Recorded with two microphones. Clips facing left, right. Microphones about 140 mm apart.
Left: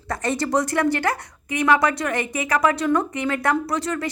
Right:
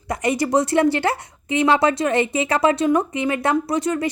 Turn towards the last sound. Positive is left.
turn(degrees=-20)  # may be behind; listen again after turning